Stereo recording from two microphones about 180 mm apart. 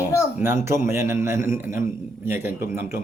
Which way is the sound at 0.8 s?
15° right (ahead or behind).